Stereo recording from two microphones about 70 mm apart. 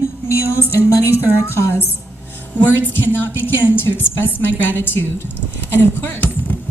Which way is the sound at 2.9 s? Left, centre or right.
Left.